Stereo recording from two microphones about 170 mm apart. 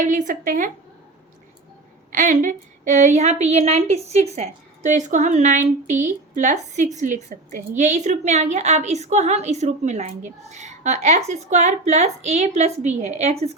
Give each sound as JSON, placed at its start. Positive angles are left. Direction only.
{"t": 0.0, "sound": "a woman's voice", "side_deg": -45}
{"t": 2.1, "sound": "a woman's voice", "side_deg": -50}